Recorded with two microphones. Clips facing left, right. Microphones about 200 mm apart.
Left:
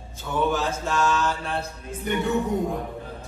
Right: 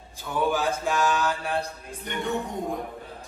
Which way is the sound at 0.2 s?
15° right (ahead or behind).